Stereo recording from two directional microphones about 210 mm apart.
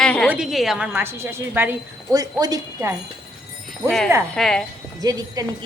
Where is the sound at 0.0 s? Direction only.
5° left (ahead or behind).